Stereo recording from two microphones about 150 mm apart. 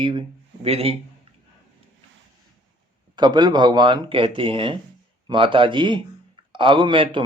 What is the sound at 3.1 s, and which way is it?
A man's voice, 30° right (ahead or behind).